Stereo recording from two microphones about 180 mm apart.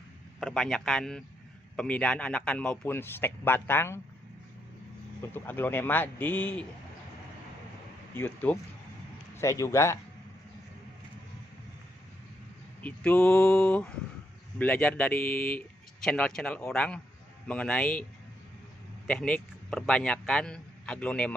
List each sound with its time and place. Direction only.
0.4 s a man's voice: 5° left (ahead or behind)
5.3 s a man's voice: 10° left (ahead or behind)
8.1 s a man's voice: 10° left (ahead or behind)
12.8 s a man's voice: 10° left (ahead or behind)
19.0 s a man's voice: 10° left (ahead or behind)